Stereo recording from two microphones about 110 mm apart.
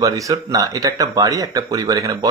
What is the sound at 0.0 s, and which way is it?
Speech, 30° right (ahead or behind).